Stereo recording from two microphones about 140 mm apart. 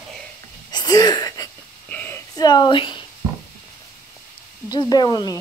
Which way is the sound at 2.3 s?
30° left (ahead or behind).